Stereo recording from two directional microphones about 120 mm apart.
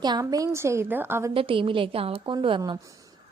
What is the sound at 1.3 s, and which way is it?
A woman's voice, 45° right (ahead or behind).